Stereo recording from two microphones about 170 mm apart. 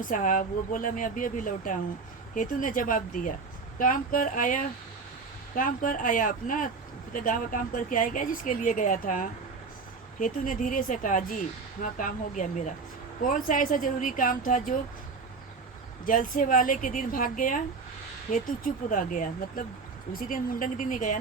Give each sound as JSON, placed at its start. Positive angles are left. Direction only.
{"t": 0.0, "sound": "speech", "side_deg": 50}
{"t": 16.0, "sound": "speech", "side_deg": 55}